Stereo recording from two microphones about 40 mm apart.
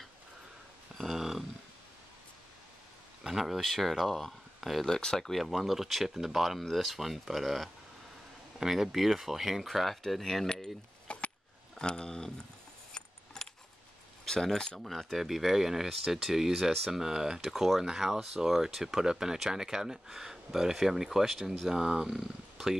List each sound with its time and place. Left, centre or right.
1.0 s a sound: centre
3.3 s speech: centre
4.8 s speech: centre
11.1 s a sound: left
11.8 s a sound: centre
12.9 s keys jangling: centre
14.2 s speech: centre
14.8 s speech: centre
17.1 s speech: centre
17.4 s speech: centre